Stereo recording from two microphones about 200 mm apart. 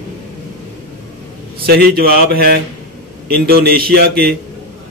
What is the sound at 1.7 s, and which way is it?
Speech, 50° right (ahead or behind).